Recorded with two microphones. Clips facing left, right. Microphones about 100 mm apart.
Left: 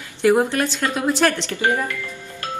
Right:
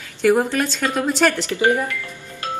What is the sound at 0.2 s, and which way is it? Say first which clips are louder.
Speech: even; 15° left (ahead or behind).